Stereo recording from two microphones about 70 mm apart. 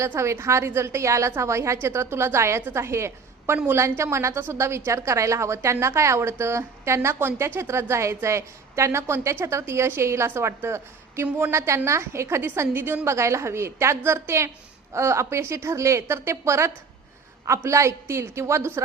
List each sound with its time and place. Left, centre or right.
0.0 s a woman's voice: right